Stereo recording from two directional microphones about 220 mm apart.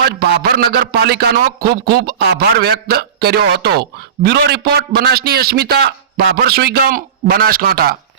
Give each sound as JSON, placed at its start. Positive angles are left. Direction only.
{"t": 0.0, "sound": "a man's voice", "side_deg": -45}